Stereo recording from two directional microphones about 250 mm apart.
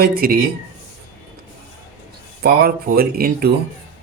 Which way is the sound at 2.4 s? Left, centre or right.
Right.